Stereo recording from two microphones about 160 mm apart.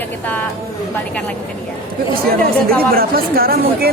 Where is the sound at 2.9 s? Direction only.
70° right (ahead or behind).